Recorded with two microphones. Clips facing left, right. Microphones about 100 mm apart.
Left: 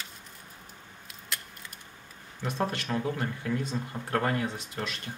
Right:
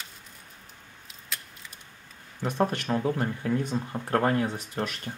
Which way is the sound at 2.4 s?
20° right (ahead or behind).